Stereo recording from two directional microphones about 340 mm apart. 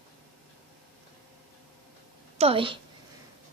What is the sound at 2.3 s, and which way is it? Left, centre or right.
Speech, centre.